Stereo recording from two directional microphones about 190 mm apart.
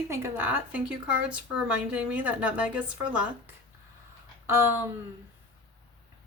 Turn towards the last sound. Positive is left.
turn(degrees=-10)  # may be behind; listen again after turning